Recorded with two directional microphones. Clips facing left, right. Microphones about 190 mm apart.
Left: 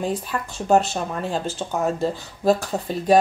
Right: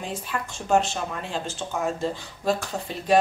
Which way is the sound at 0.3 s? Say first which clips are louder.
Left 3 dB; 40° left (ahead or behind).